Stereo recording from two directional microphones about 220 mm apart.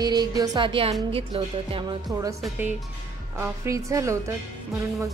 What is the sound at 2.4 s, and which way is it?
A woman's voice, 5° right (ahead or behind).